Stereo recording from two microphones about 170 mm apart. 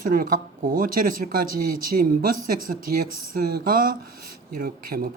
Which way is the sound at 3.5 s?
55° right (ahead or behind).